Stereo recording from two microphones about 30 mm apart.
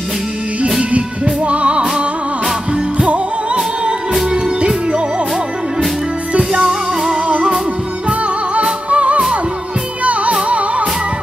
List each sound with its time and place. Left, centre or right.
0.9 s music: right
4.6 s music: right
6.5 s music: right
8.9 s music: right